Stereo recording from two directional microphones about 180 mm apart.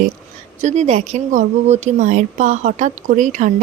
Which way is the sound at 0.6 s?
40° right (ahead or behind).